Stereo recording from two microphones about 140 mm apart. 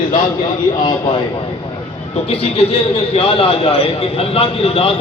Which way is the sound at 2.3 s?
45° left (ahead or behind).